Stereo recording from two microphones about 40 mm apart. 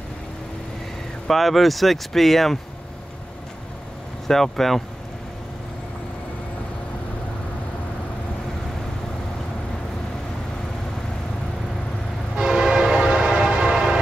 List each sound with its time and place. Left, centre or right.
1.3 s speech: centre
4.3 s speech: centre
12.4 s train: centre